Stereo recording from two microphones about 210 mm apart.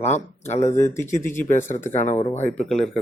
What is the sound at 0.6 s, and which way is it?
Speech, 15° left (ahead or behind).